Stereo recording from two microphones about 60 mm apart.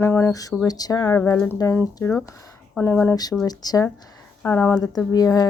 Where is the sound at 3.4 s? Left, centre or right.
Left.